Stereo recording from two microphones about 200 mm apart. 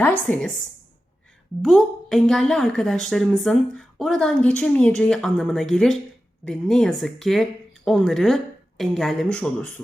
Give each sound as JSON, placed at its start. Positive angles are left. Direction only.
{"t": 0.0, "sound": "a woman's voice", "side_deg": 5}
{"t": 1.6, "sound": "a woman's voice", "side_deg": 0}